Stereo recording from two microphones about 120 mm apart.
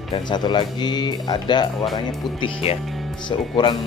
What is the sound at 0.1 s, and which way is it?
Speech, 35° left (ahead or behind).